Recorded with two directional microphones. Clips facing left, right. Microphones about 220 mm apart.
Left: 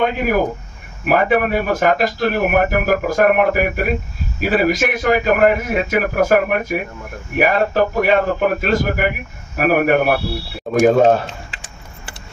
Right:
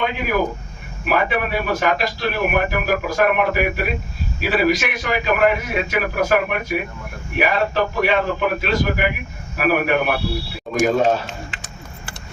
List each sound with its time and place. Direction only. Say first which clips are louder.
0.0 s a man's voice: left 4 dB; 45° left (ahead or behind)